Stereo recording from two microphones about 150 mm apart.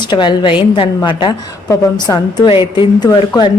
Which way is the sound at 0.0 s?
30° left (ahead or behind).